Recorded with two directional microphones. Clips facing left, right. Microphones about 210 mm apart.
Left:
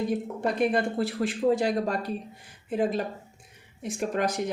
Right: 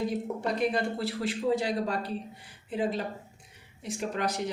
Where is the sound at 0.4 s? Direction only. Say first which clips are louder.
Left 4 dB; 55° left (ahead or behind).